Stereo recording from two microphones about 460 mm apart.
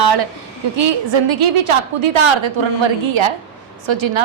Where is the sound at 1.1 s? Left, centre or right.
Right.